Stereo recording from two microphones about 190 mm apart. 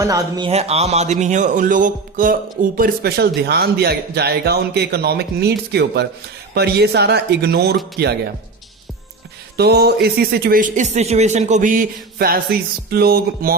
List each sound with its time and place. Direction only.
0.0 s speech: 20° right (ahead or behind); by 8.1 s 55° right (ahead or behind)
9.6 s speech: 60° right (ahead or behind)